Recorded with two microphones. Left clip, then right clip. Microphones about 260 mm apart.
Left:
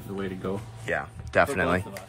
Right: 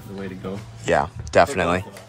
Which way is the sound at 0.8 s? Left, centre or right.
Centre.